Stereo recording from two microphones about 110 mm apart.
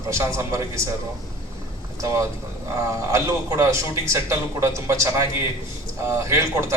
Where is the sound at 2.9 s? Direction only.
30° right (ahead or behind).